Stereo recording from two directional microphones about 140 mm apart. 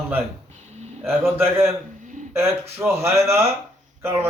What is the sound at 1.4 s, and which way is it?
Speech, 20° right (ahead or behind).